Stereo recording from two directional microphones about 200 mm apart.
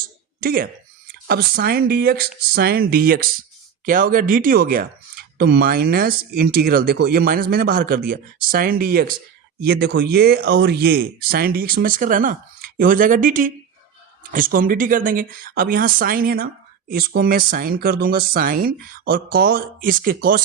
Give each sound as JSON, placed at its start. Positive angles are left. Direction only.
{"t": 0.3, "sound": "speech", "side_deg": -45}